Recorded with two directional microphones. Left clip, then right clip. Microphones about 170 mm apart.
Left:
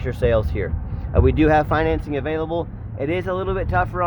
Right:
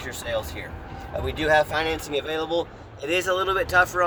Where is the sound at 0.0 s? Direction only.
50° left (ahead or behind).